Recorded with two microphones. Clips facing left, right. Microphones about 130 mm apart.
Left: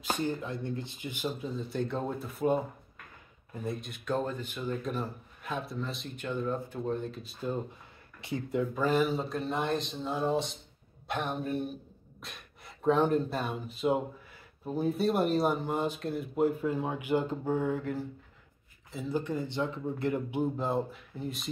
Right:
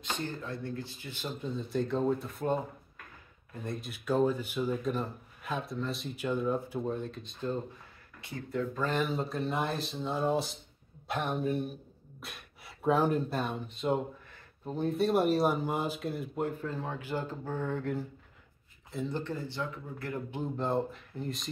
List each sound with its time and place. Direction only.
0.2 s speech: 15° left (ahead or behind)
1.5 s speech: centre (ahead or behind)
8.2 s speech: 20° left (ahead or behind)
19.4 s speech: 20° left (ahead or behind)
20.2 s speech: 10° left (ahead or behind)